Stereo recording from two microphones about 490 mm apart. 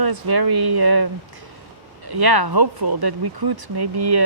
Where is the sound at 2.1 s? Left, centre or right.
Right.